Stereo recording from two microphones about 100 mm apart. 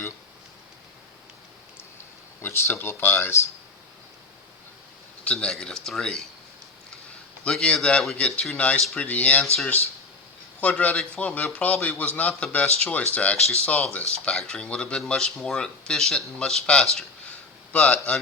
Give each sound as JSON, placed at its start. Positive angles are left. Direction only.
{"t": 2.4, "sound": "speech", "side_deg": 25}
{"t": 5.2, "sound": "speech", "side_deg": 10}
{"t": 7.4, "sound": "speech", "side_deg": 10}
{"t": 8.8, "sound": "speech", "side_deg": 0}
{"t": 9.0, "sound": "speech", "side_deg": 15}
{"t": 10.6, "sound": "speech", "side_deg": 15}